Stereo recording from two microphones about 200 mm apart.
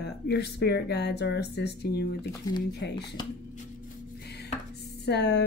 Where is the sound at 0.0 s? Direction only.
55° left (ahead or behind).